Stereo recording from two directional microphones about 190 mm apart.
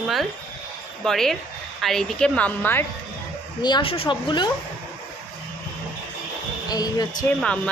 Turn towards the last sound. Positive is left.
turn(degrees=5)  # may be behind; listen again after turning